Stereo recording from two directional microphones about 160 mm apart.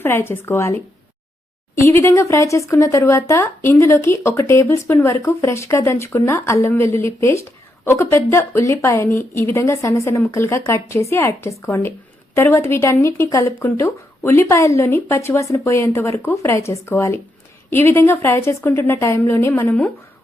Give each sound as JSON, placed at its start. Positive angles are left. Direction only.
{"t": 0.0, "sound": "speech", "side_deg": 15}